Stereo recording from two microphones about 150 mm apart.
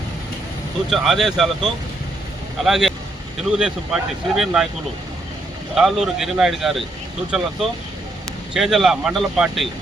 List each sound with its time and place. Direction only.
0.9 s speech: centre (ahead or behind)
5.7 s speech: 5° right (ahead or behind)